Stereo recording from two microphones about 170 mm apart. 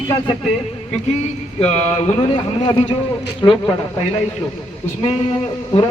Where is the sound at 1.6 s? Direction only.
40° left (ahead or behind).